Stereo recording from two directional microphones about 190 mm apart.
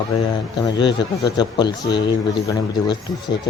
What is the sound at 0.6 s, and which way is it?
Speech, 20° left (ahead or behind).